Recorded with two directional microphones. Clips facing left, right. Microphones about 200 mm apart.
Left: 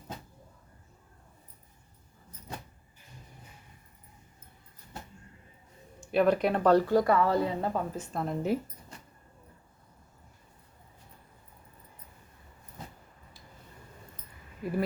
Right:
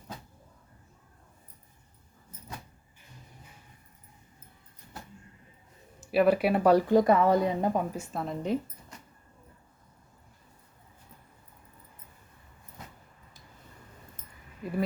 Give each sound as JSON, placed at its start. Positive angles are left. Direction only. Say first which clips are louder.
{"t": 6.0, "sound": "speech", "louder": "right 1 dB", "side_deg": -5}
{"t": 8.9, "sound": "vehicle", "louder": "even", "side_deg": 30}